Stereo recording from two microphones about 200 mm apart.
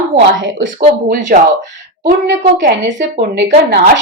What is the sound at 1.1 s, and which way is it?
Speech, 40° right (ahead or behind).